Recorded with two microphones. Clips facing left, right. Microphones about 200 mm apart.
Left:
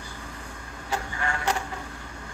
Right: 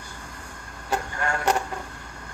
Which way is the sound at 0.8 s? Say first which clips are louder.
Right 3 dB; 45° right (ahead or behind).